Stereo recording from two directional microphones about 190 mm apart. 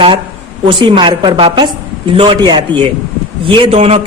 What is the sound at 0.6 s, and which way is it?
A woman's voice, 25° right (ahead or behind).